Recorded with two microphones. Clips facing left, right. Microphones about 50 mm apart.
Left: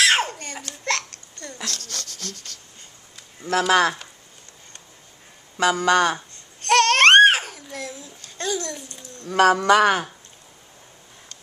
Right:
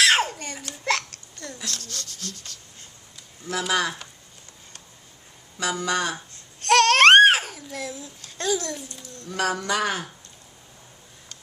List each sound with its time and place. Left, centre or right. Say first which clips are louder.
0.0 s babbling: even; centre
1.9 s speech: left 2 dB; left
3.4 s speech: left 7 dB; left
5.6 s speech: left 7 dB; left
6.6 s babbling: even; centre
9.3 s speech: left 9 dB; left